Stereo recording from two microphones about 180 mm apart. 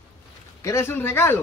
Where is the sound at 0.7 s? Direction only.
15° left (ahead or behind).